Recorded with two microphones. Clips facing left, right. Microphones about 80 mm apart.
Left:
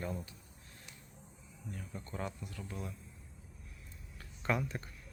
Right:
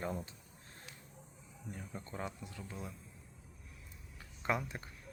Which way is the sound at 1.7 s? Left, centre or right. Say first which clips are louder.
Left 1 dB; right.